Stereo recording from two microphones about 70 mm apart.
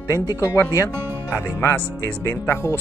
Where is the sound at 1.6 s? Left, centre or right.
Left.